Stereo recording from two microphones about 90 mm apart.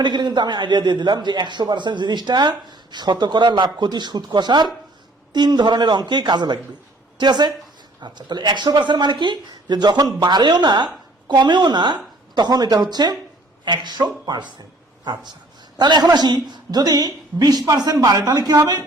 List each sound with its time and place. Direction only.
0.0 s a man's voice: 60° right (ahead or behind); by 18.9 s 40° right (ahead or behind)